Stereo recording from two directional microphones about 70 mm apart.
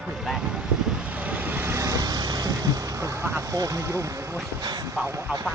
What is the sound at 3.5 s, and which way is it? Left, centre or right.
Speech, right.